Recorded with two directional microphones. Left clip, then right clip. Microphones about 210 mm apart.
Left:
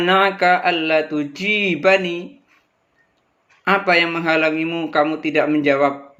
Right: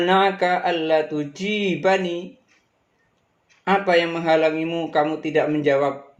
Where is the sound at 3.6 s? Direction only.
20° left (ahead or behind).